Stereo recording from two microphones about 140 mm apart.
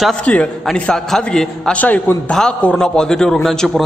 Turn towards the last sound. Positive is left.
turn(degrees=5)  # may be behind; listen again after turning